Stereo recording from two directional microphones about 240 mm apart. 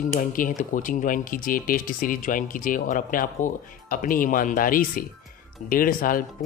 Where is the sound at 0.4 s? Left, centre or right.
Left.